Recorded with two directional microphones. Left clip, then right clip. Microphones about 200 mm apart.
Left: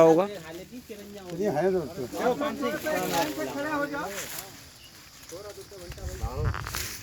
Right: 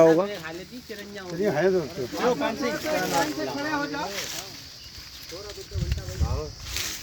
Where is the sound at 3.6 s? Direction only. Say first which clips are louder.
Even; 55° right (ahead or behind).